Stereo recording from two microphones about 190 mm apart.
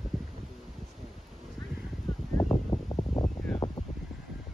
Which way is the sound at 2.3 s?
20° left (ahead or behind).